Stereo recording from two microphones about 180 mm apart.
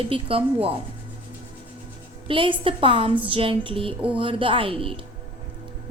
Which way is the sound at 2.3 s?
30° right (ahead or behind).